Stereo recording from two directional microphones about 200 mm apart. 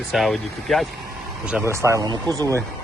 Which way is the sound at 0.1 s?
Centre (ahead or behind).